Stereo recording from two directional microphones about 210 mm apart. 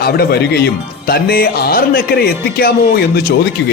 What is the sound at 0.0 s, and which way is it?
Speech, 45° left (ahead or behind).